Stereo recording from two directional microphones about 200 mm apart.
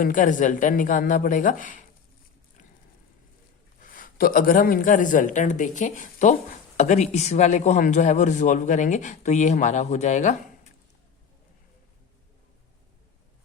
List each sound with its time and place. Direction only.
0.0 s a man's voice: 40° left (ahead or behind)
3.8 s a man's voice: 45° left (ahead or behind)